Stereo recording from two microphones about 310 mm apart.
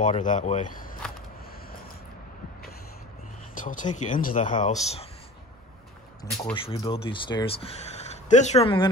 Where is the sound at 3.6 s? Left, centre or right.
Left.